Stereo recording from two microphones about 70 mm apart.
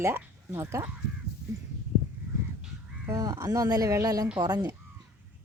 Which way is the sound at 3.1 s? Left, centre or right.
Right.